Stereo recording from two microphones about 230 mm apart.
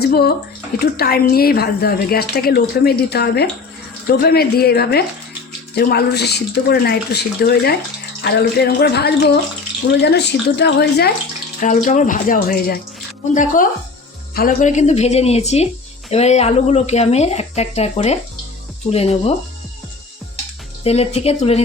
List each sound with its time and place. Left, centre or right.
0.0 s a woman's voice: left
11.6 s speech: left
20.8 s speech: left